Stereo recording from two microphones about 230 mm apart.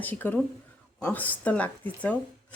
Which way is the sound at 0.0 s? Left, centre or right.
Centre.